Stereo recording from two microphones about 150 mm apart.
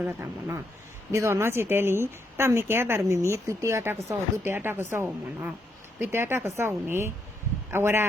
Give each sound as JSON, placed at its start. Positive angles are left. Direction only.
{"t": 0.0, "sound": "a woman's voice", "side_deg": -15}